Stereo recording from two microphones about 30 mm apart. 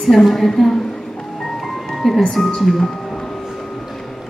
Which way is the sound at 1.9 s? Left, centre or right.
Centre.